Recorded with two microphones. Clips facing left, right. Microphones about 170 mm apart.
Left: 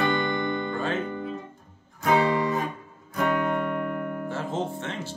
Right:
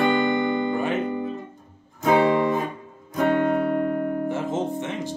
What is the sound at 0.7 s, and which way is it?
Guitar, 15° right (ahead or behind).